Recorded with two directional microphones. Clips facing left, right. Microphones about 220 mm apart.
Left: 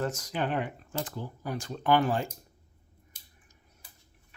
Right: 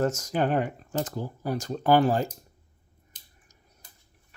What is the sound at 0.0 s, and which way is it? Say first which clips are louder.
Speech: right 6 dB; 45° right (ahead or behind).